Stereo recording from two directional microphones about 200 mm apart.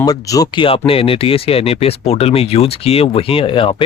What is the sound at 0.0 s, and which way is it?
Speech, 20° left (ahead or behind).